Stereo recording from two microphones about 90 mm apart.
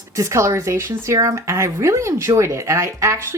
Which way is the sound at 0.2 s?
35° right (ahead or behind).